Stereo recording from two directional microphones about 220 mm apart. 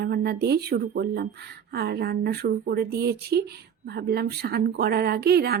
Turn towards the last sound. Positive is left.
turn(degrees=-45)  # may be behind; listen again after turning